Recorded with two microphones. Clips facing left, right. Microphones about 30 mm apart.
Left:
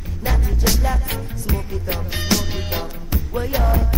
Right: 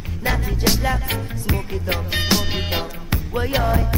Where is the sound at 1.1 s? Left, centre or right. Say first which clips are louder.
Right 1 dB; right.